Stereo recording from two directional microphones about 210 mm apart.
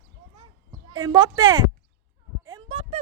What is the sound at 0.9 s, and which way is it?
Speech, 20° right (ahead or behind).